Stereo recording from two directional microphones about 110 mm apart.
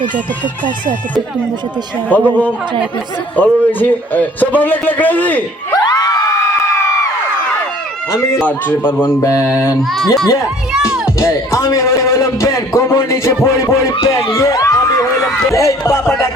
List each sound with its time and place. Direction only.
2.1 s a man's voice: 15° left (ahead or behind)
3.3 s a man's voice: 15° left (ahead or behind)
5.7 s crowd: 35° left (ahead or behind)
8.4 s a man's voice: 15° left (ahead or behind)
9.9 s speech: centre (ahead or behind)
10.7 s music: 5° right (ahead or behind)
11.2 s a man's voice: 25° left (ahead or behind)
14.3 s a sound: 30° left (ahead or behind)
15.2 s a sound: centre (ahead or behind)
15.4 s a man's voice: 30° left (ahead or behind)